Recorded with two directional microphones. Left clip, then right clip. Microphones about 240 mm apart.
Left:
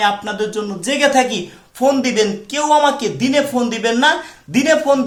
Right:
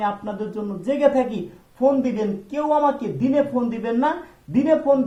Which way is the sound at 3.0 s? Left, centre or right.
Centre.